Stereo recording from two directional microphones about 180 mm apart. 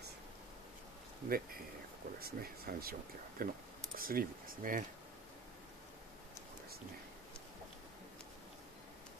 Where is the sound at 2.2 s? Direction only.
55° right (ahead or behind).